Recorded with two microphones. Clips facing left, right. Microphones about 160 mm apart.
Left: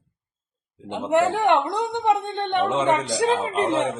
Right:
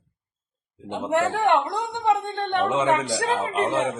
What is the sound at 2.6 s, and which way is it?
Speech, 10° right (ahead or behind).